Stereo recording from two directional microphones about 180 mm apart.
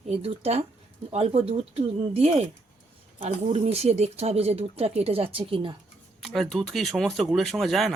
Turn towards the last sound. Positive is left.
turn(degrees=0)  # may be behind; listen again after turning